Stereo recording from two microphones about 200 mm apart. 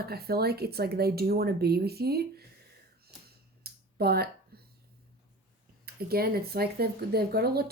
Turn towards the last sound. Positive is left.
turn(degrees=-50)  # may be behind; listen again after turning